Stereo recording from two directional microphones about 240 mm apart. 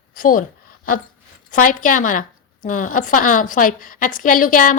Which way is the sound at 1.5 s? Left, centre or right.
Left.